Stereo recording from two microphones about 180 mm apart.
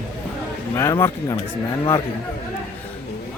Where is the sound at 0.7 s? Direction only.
15° left (ahead or behind).